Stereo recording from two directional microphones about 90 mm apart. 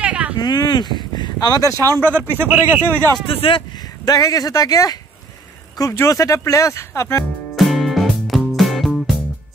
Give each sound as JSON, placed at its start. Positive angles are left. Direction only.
{"t": 0.0, "sound": "a sound", "side_deg": -15}
{"t": 0.4, "sound": "speech", "side_deg": 50}
{"t": 2.0, "sound": "a man's voice", "side_deg": -25}
{"t": 3.3, "sound": "speech", "side_deg": 80}
{"t": 4.0, "sound": "speech", "side_deg": 45}
{"t": 5.9, "sound": "speech", "side_deg": 35}
{"t": 7.5, "sound": "music", "side_deg": 0}